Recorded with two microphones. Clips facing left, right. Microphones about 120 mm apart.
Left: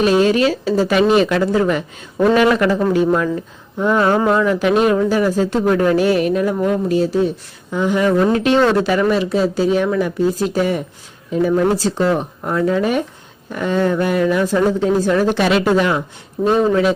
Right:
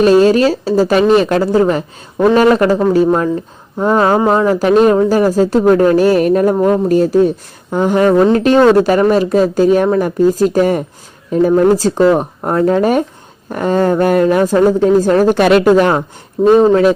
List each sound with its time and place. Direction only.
0.0 s speech: 40° right (ahead or behind)